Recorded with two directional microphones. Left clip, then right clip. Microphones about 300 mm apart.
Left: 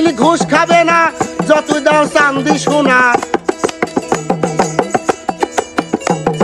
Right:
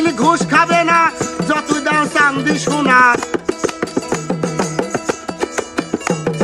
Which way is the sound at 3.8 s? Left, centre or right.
Left.